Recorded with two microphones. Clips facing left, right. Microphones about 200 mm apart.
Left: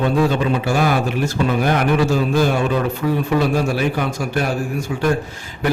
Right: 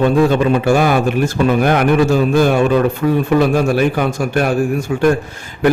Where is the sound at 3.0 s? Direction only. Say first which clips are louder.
Right 5 dB; 55° right (ahead or behind).